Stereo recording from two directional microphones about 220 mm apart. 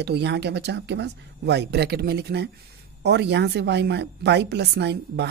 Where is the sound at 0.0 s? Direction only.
50° right (ahead or behind).